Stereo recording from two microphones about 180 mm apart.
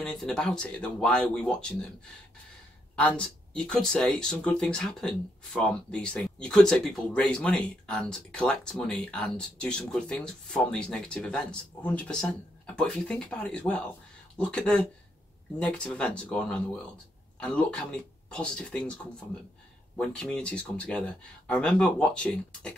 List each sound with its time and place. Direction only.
0.0 s speech: 5° left (ahead or behind)
3.0 s speech: 5° left (ahead or behind)